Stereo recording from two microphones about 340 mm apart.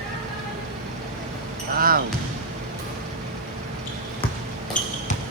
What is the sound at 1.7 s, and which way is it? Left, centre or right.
Basketball bounce, right.